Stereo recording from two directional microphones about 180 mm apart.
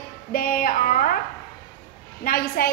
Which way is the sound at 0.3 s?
50° left (ahead or behind).